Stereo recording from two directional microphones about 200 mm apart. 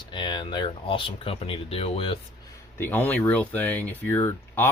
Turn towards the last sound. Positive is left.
turn(degrees=10)  # may be behind; listen again after turning